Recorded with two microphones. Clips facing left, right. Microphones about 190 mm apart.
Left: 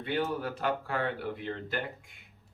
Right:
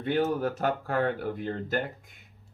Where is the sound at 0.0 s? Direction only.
45° right (ahead or behind).